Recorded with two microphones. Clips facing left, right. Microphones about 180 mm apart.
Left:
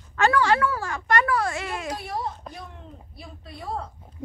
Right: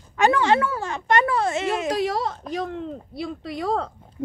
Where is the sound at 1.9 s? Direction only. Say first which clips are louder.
Right 7 dB; 90° right.